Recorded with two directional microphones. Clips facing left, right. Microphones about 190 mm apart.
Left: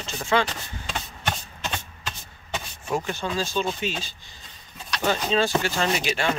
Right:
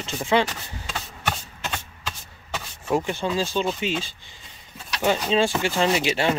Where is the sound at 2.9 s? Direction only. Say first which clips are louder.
Right 3 dB; 20° right (ahead or behind).